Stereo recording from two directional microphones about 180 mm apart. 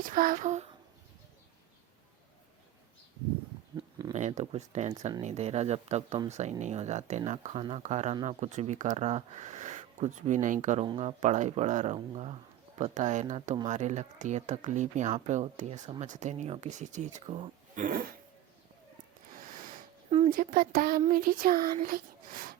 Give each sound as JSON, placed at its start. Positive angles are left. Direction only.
{"t": 0.0, "sound": "a child's voice", "side_deg": -50}
{"t": 3.8, "sound": "a sound", "side_deg": -20}
{"t": 4.1, "sound": "speech", "side_deg": -40}
{"t": 10.8, "sound": "speech", "side_deg": -30}
{"t": 11.2, "sound": "speech", "side_deg": -40}
{"t": 20.1, "sound": "a sound", "side_deg": -35}
{"t": 20.3, "sound": "a child's voice", "side_deg": -50}